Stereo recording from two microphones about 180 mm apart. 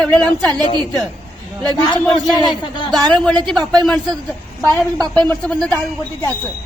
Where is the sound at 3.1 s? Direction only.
5° left (ahead or behind).